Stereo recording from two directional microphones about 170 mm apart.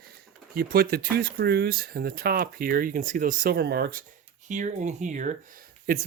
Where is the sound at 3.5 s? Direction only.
70° right (ahead or behind).